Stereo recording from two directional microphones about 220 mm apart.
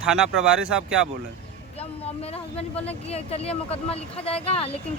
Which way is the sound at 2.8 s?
25° left (ahead or behind).